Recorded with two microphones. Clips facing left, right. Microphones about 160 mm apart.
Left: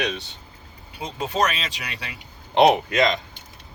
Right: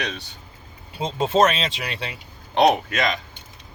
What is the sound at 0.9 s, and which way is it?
Speech, 25° right (ahead or behind).